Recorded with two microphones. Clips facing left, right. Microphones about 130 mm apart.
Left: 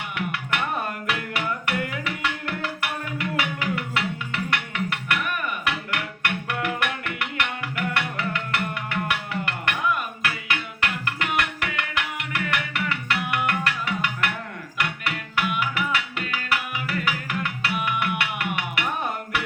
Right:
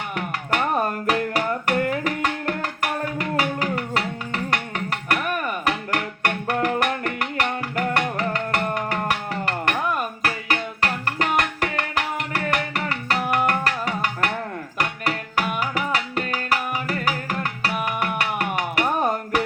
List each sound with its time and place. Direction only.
0.2 s music: 40° right (ahead or behind)